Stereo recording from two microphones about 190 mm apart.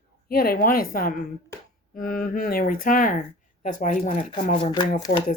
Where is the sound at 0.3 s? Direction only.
50° left (ahead or behind).